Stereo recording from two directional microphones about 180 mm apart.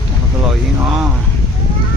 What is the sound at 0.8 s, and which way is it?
Speech, 5° right (ahead or behind).